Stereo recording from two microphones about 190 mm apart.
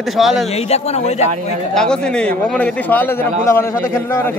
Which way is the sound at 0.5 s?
35° left (ahead or behind).